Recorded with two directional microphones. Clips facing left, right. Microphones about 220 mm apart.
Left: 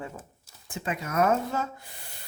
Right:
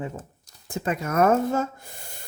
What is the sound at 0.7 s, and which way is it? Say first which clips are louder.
A woman's voice: right 6 dB; 45° right (ahead or behind).